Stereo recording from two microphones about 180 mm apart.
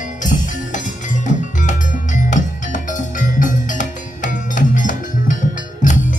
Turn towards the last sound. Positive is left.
turn(degrees=45)  # may be behind; listen again after turning